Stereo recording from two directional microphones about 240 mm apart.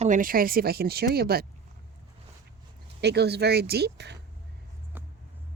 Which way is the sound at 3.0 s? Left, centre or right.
Right.